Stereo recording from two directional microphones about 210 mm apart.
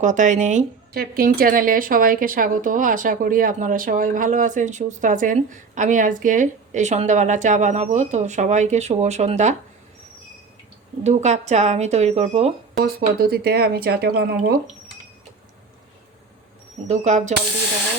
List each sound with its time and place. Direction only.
0.0 s speech: 35° right (ahead or behind)
11.0 s speech: 35° right (ahead or behind)
12.8 s speech: 45° right (ahead or behind)
16.9 s speech: 35° right (ahead or behind)